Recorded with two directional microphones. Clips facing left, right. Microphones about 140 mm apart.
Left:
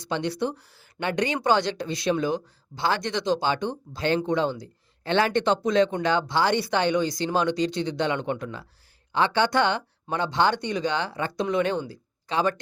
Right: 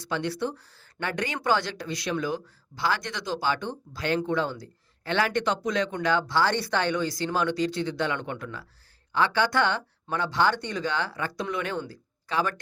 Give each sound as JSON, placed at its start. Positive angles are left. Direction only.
{"t": 0.0, "sound": "speech", "side_deg": 20}